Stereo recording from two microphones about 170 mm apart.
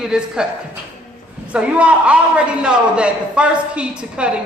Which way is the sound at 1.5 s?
5° right (ahead or behind).